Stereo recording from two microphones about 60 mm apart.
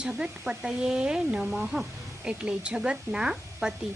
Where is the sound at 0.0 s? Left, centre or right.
Centre.